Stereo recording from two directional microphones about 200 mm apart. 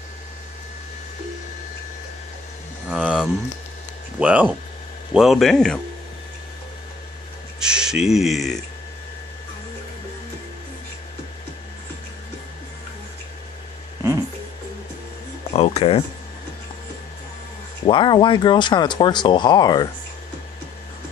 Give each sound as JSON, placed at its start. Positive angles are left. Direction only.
{"t": 2.9, "sound": "a sound", "side_deg": -5}
{"t": 4.2, "sound": "speech", "side_deg": -5}
{"t": 7.6, "sound": "speech", "side_deg": -5}
{"t": 15.5, "sound": "speech", "side_deg": 30}
{"t": 17.8, "sound": "speech", "side_deg": 25}